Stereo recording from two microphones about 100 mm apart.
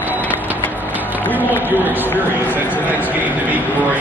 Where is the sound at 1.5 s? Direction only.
20° right (ahead or behind).